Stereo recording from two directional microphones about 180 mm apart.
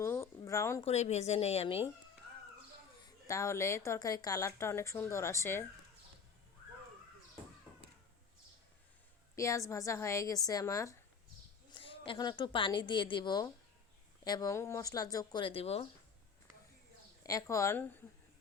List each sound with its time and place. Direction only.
0.0 s a sound: 15° left (ahead or behind)
0.8 s a woman's voice: 35° left (ahead or behind)
3.0 s a woman's voice: 15° left (ahead or behind)
9.3 s a woman's voice: 15° left (ahead or behind)
11.7 s a woman's voice: 30° left (ahead or behind)
17.2 s a woman's voice: 20° left (ahead or behind)